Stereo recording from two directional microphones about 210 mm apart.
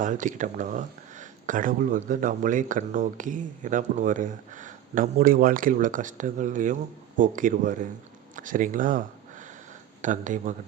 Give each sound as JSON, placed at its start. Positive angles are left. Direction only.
{"t": 0.0, "sound": "speech", "side_deg": -35}